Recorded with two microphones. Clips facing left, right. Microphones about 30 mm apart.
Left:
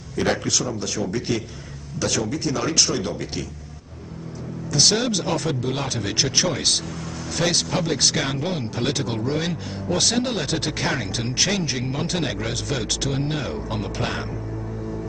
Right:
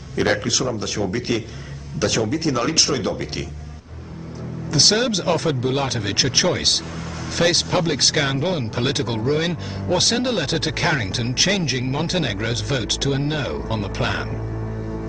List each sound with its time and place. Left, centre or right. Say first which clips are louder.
0.1 s a man's voice: right 2 dB; centre
4.7 s speech: right 2 dB; centre